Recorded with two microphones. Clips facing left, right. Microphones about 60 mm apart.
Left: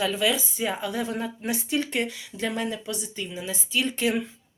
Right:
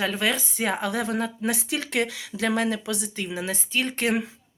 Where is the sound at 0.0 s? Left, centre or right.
Right.